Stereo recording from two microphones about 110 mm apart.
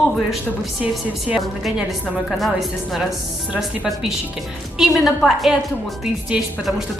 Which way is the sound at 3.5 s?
10° right (ahead or behind).